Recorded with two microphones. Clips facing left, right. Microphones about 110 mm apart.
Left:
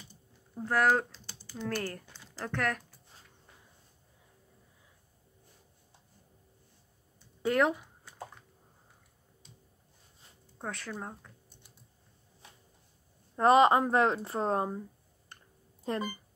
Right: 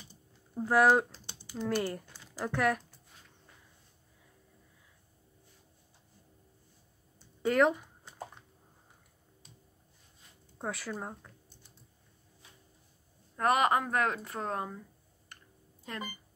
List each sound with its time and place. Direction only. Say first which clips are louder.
0.6 s speech: right 3 dB; 10° right (ahead or behind)
1.1 s typing: right 1 dB; 40° right (ahead or behind)
1.7 s speech: right 3 dB; 15° right (ahead or behind)
7.4 s speech: right 1 dB; centre (ahead or behind)
10.6 s speech: right 2 dB; 5° right (ahead or behind)
13.4 s speech: left 5 dB; 30° left (ahead or behind)
15.3 s clicking: left 1 dB; 30° left (ahead or behind)
15.8 s speech: left 7 dB; 35° left (ahead or behind)